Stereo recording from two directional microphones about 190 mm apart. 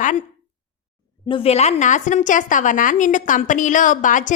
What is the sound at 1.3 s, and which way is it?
A woman's voice, 30° left (ahead or behind).